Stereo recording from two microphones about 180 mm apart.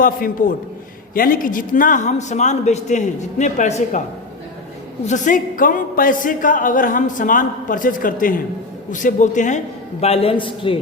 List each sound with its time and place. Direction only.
0.0 s speech: 50° left (ahead or behind)
5.0 s speech: 45° left (ahead or behind); by 10.8 s 30° left (ahead or behind)